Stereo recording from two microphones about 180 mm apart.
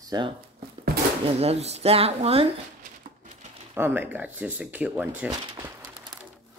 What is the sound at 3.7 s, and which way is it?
Speech, 10° right (ahead or behind).